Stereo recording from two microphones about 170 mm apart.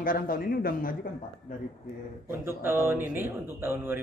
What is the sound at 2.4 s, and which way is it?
Speech, 15° right (ahead or behind).